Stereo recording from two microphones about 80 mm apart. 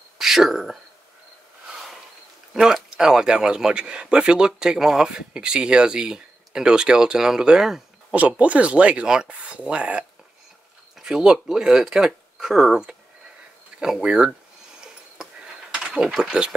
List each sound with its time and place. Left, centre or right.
0.2 s speech: centre
1.7 s a sound: centre
2.5 s speech: centre
8.1 s speech: centre
15.7 s speech: centre